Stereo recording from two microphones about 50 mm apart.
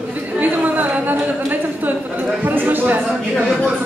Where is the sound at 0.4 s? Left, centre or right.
Right.